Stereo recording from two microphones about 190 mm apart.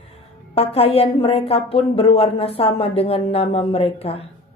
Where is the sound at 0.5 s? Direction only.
30° left (ahead or behind).